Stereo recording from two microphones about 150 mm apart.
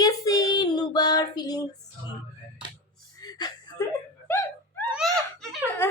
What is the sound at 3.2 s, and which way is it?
Whimper, 25° left (ahead or behind).